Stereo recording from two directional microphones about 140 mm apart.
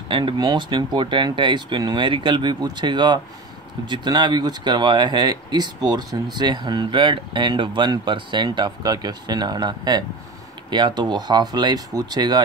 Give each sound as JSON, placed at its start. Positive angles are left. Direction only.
{"t": 0.1, "sound": "speech", "side_deg": -35}